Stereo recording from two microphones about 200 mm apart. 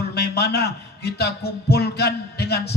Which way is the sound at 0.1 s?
55° left (ahead or behind).